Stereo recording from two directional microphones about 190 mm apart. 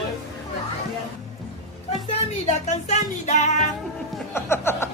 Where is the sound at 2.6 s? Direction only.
35° left (ahead or behind).